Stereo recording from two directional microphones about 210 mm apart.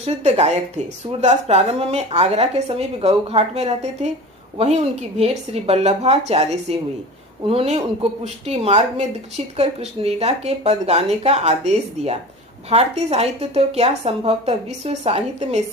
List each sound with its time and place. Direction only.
0.0 s a woman's voice: 30° right (ahead or behind)